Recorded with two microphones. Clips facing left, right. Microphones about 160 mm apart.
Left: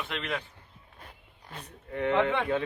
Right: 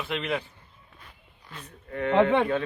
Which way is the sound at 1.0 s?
50° left (ahead or behind).